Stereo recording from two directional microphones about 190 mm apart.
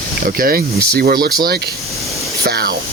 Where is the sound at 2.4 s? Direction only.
55° right (ahead or behind).